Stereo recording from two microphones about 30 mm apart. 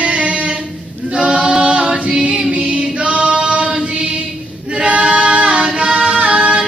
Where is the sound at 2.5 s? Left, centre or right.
Right.